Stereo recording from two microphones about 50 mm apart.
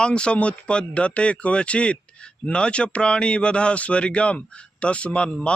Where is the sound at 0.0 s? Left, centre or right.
Centre.